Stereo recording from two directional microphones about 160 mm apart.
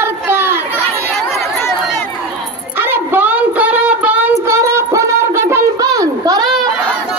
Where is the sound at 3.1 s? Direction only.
10° right (ahead or behind).